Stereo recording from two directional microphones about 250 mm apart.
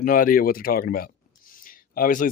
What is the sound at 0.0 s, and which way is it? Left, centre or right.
Speech, left.